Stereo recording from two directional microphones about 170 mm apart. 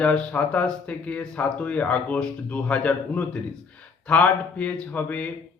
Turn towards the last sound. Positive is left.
turn(degrees=10)  # may be behind; listen again after turning